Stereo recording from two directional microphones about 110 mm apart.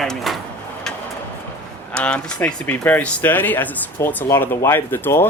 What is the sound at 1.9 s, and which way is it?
Speech, 10° left (ahead or behind).